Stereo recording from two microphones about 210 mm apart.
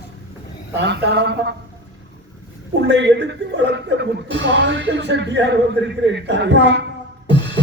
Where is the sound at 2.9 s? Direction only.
55° right (ahead or behind).